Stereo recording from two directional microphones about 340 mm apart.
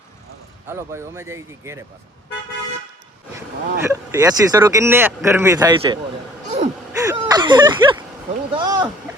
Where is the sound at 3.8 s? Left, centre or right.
Centre.